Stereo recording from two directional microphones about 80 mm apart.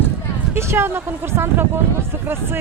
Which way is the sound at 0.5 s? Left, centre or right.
Right.